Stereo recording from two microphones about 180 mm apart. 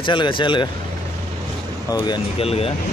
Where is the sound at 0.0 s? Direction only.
25° left (ahead or behind).